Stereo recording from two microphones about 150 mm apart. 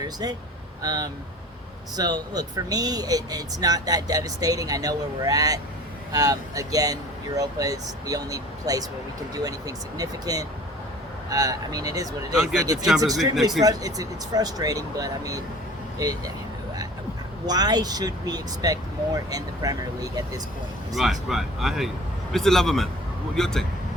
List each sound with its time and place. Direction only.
0.0 s speech: 25° right (ahead or behind)
17.4 s speech: 25° right (ahead or behind)
20.9 s speech: centre (ahead or behind)